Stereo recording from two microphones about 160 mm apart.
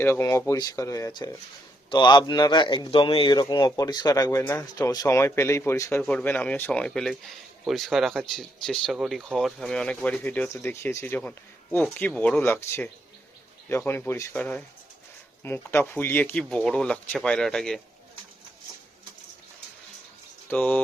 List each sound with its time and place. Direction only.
0.0 s speech: 15° left (ahead or behind)
6.0 s speech: 5° left (ahead or behind)
20.5 s speech: 10° left (ahead or behind)